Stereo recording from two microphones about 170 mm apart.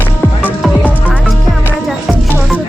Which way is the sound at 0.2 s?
5° left (ahead or behind).